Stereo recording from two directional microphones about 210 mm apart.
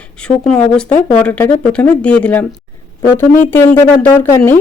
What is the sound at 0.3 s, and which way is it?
Speech, 5° left (ahead or behind).